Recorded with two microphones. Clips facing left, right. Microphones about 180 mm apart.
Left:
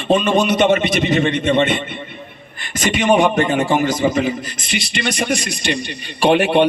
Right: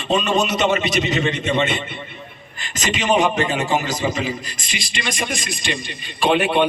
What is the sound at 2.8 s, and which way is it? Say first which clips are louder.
Beatboxing: left 4 dB; 55° left (ahead or behind).